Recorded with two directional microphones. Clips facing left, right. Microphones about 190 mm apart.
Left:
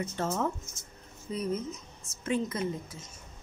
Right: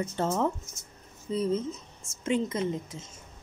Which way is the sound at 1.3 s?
25° right (ahead or behind).